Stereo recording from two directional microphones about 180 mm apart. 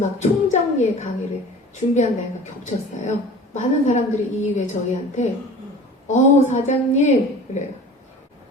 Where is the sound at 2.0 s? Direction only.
40° left (ahead or behind).